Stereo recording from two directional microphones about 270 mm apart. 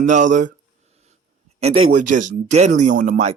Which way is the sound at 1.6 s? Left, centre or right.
Right.